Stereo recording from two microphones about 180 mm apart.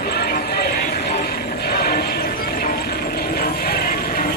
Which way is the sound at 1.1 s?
60° left (ahead or behind).